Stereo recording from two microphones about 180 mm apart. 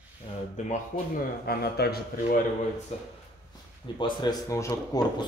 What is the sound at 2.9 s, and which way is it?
Speech, 35° left (ahead or behind).